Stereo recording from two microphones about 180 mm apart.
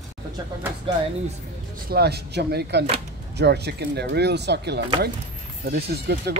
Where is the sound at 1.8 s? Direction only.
60° right (ahead or behind).